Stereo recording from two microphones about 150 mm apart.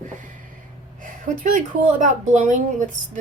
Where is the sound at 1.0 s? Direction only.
60° right (ahead or behind).